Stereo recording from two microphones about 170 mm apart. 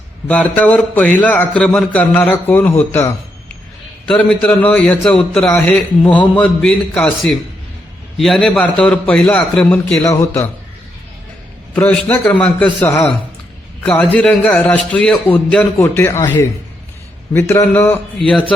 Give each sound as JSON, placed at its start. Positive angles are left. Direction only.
{"t": 0.3, "sound": "a man's voice", "side_deg": 10}
{"t": 4.1, "sound": "a man's voice", "side_deg": 5}
{"t": 11.7, "sound": "a man's voice", "side_deg": 10}
{"t": 15.8, "sound": "a man's voice", "side_deg": 15}
{"t": 17.3, "sound": "a man's voice", "side_deg": 15}